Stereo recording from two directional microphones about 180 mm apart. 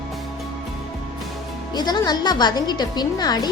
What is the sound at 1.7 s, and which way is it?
A woman's voice, 25° left (ahead or behind).